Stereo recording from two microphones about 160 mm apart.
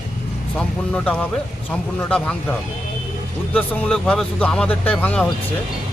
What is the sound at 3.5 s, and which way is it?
Speech, 5° left (ahead or behind).